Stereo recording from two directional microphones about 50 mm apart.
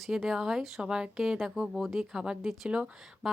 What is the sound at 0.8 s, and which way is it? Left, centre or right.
Speech, centre.